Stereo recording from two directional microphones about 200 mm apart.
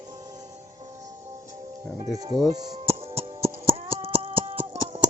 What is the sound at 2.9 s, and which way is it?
Music, 30° right (ahead or behind).